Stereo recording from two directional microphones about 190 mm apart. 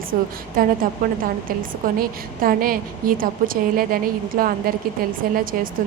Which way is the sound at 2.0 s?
50° right (ahead or behind).